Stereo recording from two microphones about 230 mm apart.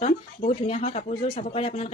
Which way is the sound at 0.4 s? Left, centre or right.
Left.